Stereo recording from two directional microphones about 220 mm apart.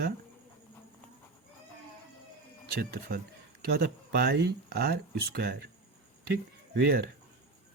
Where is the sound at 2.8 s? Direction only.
45° right (ahead or behind).